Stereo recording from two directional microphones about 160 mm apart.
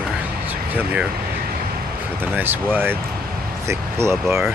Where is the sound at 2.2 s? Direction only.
10° right (ahead or behind).